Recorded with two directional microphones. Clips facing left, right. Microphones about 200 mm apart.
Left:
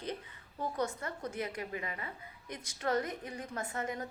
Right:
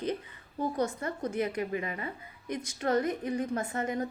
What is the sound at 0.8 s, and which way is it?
A woman's voice, 20° right (ahead or behind).